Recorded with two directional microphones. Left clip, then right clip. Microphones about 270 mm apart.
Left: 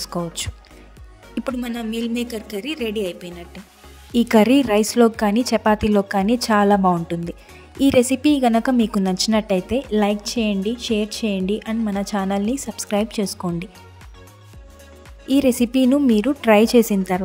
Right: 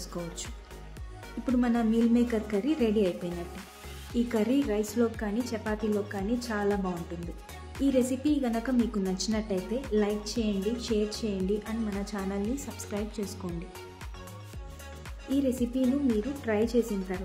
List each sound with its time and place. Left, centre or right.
0.0 s a woman's voice: left
15.2 s a woman's voice: left